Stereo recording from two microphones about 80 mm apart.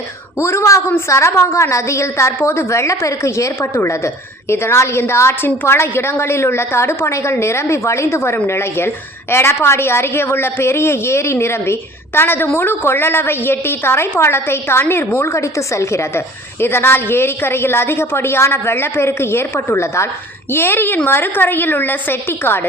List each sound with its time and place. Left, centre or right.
0.3 s a woman's voice: left